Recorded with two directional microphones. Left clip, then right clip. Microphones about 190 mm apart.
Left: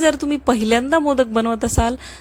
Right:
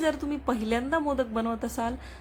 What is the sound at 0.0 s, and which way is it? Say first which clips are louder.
Speech: left 11 dB; 40° left (ahead or behind).